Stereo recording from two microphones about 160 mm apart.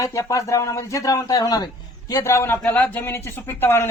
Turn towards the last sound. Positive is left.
turn(degrees=15)  # may be behind; listen again after turning